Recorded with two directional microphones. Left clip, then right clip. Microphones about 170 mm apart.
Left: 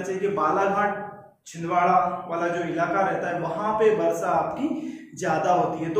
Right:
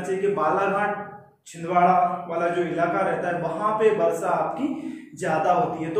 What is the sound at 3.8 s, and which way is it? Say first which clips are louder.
Speech: even; centre (ahead or behind).